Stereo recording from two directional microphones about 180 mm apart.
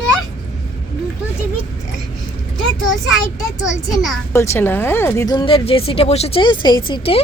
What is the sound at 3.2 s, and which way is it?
A woman's voice, 20° left (ahead or behind).